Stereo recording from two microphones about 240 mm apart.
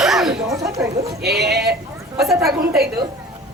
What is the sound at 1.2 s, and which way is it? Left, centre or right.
Speech, right.